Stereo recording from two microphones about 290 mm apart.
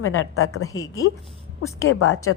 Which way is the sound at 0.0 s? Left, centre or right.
Left.